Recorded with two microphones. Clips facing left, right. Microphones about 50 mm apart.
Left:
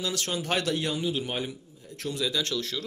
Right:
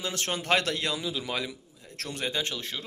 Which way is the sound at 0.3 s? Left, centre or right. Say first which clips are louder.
Right 3 dB; right.